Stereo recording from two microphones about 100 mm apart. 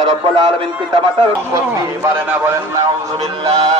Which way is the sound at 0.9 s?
60° right (ahead or behind).